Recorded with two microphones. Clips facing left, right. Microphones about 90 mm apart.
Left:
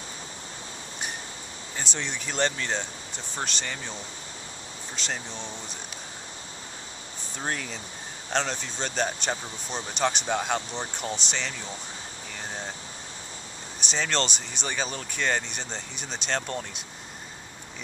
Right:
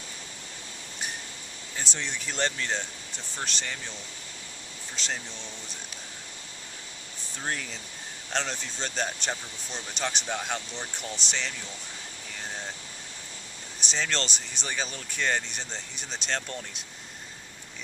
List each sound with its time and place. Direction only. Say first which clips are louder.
1.8 s speech: left 1 dB; centre (ahead or behind)
4.9 s speech: left 1 dB; centre (ahead or behind)
7.4 s speech: left 2 dB; centre (ahead or behind)
10.7 s speech: left 5 dB; 35° left (ahead or behind)
11.2 s speech: left 1 dB; centre (ahead or behind)
13.7 s speech: left 3 dB; centre (ahead or behind)